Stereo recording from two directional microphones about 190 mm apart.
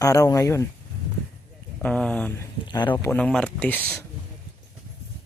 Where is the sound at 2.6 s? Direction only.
25° left (ahead or behind).